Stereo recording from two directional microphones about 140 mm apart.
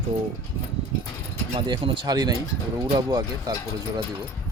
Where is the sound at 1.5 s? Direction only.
40° right (ahead or behind).